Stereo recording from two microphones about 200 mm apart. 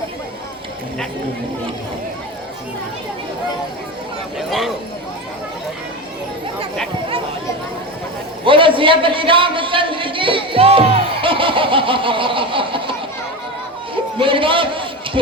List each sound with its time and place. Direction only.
4.4 s speech: centre (ahead or behind)
8.4 s speech: 25° right (ahead or behind)
13.9 s a sound: 25° right (ahead or behind)